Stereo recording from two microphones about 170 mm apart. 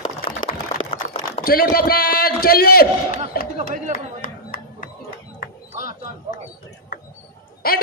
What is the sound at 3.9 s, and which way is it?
Chop, 55° left (ahead or behind).